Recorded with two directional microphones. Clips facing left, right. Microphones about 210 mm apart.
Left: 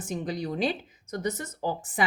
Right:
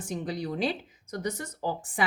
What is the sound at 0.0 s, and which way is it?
A woman's voice, 20° left (ahead or behind).